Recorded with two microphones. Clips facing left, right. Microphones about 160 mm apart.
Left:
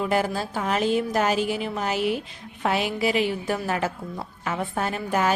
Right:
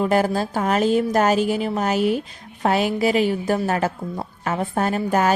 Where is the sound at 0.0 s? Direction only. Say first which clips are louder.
Right 5 dB; 45° right (ahead or behind).